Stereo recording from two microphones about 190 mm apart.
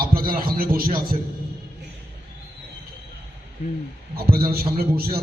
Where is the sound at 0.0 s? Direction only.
50° right (ahead or behind).